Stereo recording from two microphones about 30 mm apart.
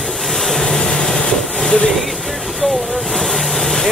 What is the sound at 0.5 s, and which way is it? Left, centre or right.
Vehicle, left.